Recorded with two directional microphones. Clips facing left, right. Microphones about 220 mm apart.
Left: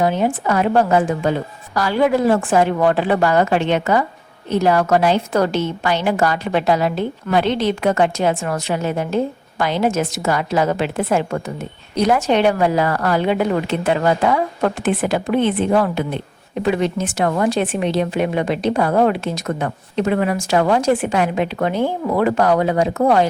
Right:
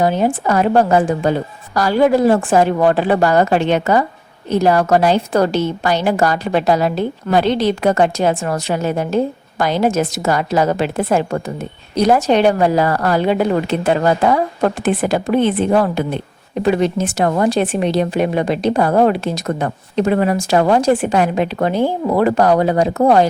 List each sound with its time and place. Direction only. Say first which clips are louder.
0.0 s a woman's voice: right 2 dB; 35° right (ahead or behind)